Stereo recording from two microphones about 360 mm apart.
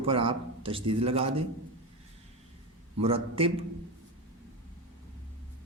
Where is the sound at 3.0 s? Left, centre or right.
Centre.